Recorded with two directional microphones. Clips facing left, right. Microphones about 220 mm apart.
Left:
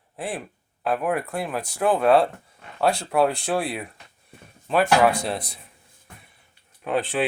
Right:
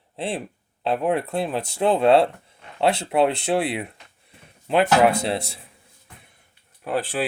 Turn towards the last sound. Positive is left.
turn(degrees=-5)  # may be behind; listen again after turning